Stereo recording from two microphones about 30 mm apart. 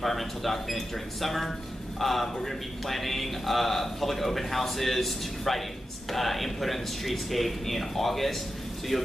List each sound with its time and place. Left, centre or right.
0.0 s a man's voice: centre